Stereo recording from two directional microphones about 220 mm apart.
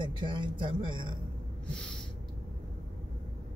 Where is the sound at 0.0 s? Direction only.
20° right (ahead or behind).